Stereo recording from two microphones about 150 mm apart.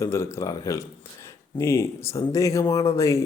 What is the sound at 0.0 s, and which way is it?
A man's voice, 20° left (ahead or behind).